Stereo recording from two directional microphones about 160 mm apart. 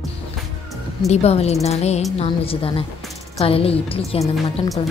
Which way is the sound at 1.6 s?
40° left (ahead or behind).